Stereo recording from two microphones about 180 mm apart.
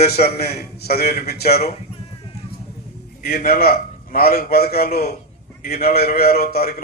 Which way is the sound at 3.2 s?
55° left (ahead or behind).